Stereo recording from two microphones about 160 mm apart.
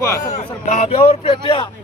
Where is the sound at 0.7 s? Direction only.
45° left (ahead or behind).